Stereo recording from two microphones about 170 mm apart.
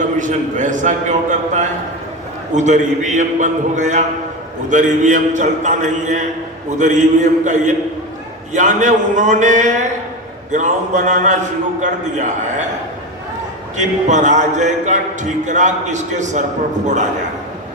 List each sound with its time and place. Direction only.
0.2 s a man's voice: 50° right (ahead or behind)
13.7 s a man's voice: 45° right (ahead or behind)